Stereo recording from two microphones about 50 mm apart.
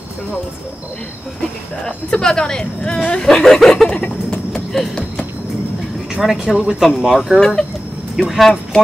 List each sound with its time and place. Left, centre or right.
1.9 s speech: centre
3.9 s a sound: centre
6.2 s speech: centre
7.3 s speech: centre